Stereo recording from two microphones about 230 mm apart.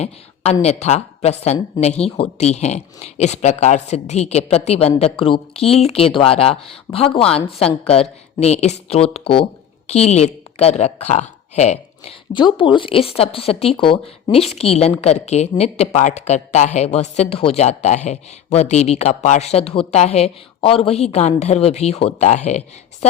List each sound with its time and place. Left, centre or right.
0.6 s a woman's voice: left